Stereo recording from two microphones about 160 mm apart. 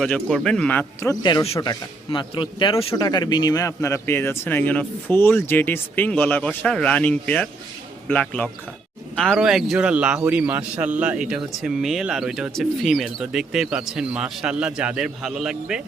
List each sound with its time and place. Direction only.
0.0 s speech: 5° left (ahead or behind)
1.2 s speech: 25° left (ahead or behind); by 15.8 s centre (ahead or behind)